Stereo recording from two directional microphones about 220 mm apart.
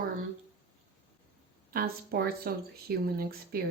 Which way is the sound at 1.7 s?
45° right (ahead or behind).